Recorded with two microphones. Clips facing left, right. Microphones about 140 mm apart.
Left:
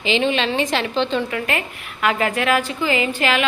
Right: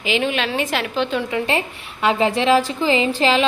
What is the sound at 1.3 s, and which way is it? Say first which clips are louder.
A woman's voice: right 3 dB; 30° right (ahead or behind).